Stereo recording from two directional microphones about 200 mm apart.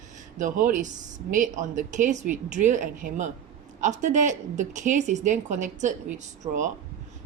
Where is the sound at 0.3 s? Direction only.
40° right (ahead or behind).